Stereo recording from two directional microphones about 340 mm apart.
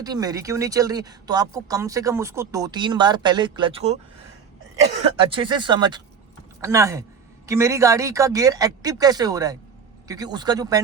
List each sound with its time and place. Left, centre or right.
0.0 s speech: centre
5.3 s speech: centre